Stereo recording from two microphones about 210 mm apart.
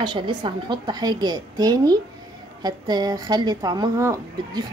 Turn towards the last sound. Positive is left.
turn(degrees=-15)  # may be behind; listen again after turning